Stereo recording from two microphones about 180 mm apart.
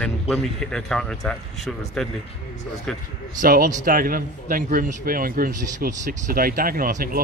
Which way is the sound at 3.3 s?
50° right (ahead or behind).